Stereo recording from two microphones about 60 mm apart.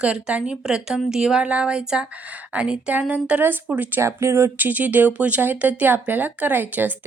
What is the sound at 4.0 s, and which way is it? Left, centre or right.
Speech, right.